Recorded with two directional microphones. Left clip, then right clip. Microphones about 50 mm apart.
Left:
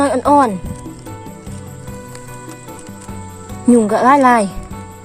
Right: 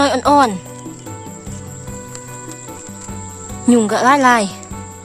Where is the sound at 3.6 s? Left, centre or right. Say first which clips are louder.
Left 2 dB; right.